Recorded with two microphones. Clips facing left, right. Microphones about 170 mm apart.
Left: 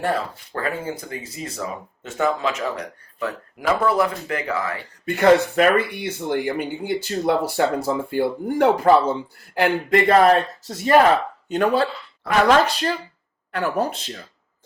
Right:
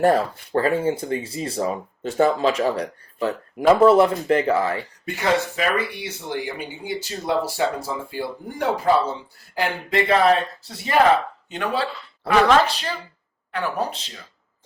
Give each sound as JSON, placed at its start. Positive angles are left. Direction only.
{"t": 0.0, "sound": "speech", "side_deg": -35}
{"t": 5.0, "sound": "speech", "side_deg": 55}